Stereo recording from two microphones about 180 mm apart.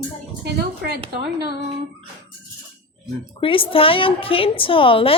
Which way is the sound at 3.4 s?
30° left (ahead or behind).